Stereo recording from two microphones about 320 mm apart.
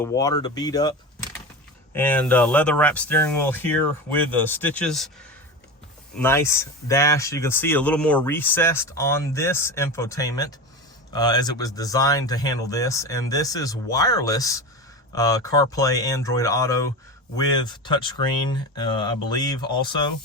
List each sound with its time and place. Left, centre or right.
0.0 s speech: centre
6.1 s speech: centre